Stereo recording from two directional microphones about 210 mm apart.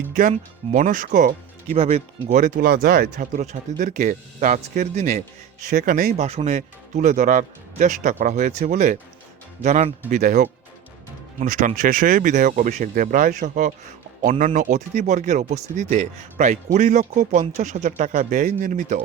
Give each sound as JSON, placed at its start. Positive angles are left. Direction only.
{"t": 0.1, "sound": "speech", "side_deg": -40}
{"t": 6.1, "sound": "speech", "side_deg": -30}